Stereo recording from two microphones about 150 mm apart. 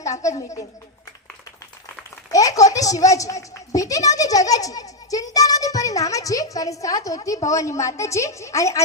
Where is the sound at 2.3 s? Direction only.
25° left (ahead or behind).